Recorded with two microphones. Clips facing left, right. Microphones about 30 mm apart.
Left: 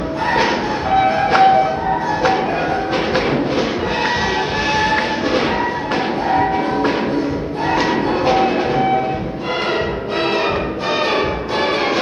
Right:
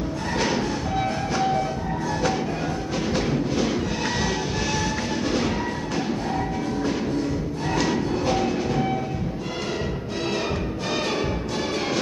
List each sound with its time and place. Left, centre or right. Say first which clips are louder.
0.9 s music: left 14 dB; left
3.2 s music: left 5 dB; left
4.7 s train: left 9 dB; left
7.7 s music: left 7 dB; left